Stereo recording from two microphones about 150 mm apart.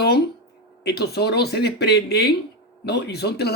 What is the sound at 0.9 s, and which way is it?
Speech, 90° left.